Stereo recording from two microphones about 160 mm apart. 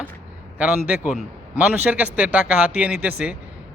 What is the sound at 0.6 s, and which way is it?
A man's voice, 10° right (ahead or behind).